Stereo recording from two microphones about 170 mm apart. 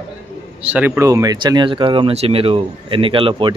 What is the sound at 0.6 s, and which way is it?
Speech, 10° right (ahead or behind).